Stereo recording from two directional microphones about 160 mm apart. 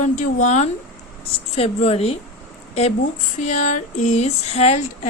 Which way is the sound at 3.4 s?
50° left (ahead or behind).